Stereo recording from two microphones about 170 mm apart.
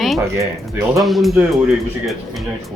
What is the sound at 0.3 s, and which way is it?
Speech, 15° right (ahead or behind).